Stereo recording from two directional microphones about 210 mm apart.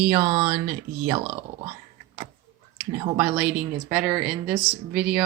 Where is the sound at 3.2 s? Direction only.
5° right (ahead or behind).